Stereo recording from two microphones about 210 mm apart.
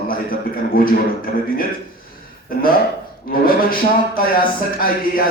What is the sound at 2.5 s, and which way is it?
Speech, 45° left (ahead or behind).